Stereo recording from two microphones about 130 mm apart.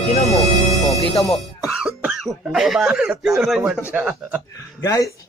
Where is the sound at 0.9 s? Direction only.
25° left (ahead or behind).